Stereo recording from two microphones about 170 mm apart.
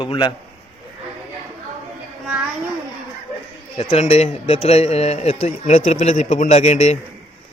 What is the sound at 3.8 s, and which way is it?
A man's voice, 40° left (ahead or behind).